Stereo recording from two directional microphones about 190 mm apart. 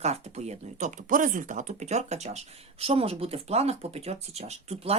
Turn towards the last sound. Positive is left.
turn(degrees=-35)  # may be behind; listen again after turning